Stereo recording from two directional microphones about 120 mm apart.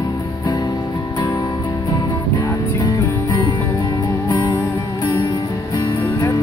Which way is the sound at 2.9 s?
30° left (ahead or behind).